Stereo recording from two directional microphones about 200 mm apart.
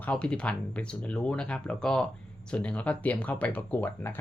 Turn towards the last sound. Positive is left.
turn(degrees=10)  # may be behind; listen again after turning